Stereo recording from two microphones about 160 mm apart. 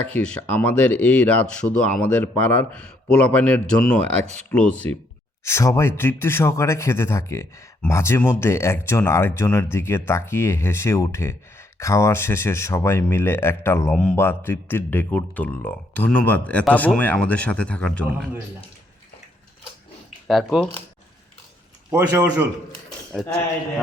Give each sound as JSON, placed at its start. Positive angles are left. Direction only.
{"t": 0.1, "sound": "speech", "side_deg": 10}
{"t": 20.2, "sound": "speech", "side_deg": 0}
{"t": 21.9, "sound": "speech", "side_deg": -10}